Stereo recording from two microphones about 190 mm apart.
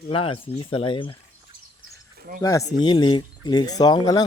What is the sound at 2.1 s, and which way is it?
Cricket, 50° right (ahead or behind).